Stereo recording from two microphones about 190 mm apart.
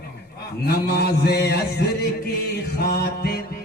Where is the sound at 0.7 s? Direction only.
60° left (ahead or behind).